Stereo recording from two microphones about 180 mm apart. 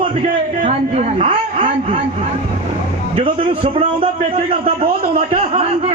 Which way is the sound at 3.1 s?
30° right (ahead or behind).